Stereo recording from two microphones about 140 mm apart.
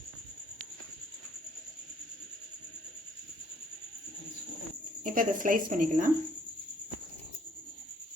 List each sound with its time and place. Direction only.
5.0 s a woman's voice: 75° right (ahead or behind)